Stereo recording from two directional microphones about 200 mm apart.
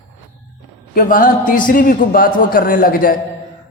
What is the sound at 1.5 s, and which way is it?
A man's voice, 45° left (ahead or behind).